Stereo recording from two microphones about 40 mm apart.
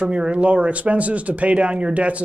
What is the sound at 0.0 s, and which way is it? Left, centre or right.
Speech, right.